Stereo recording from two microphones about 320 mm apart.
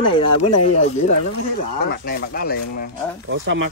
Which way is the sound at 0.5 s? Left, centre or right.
Left.